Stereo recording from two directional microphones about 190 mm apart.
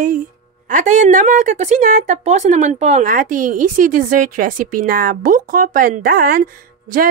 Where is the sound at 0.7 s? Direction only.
40° right (ahead or behind).